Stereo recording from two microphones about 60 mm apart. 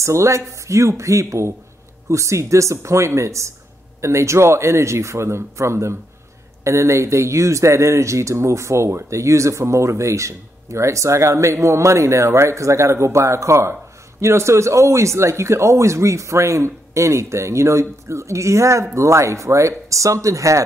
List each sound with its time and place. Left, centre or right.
0.0 s speech: right